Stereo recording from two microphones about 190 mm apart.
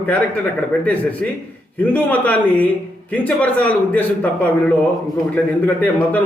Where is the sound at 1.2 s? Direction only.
10° left (ahead or behind).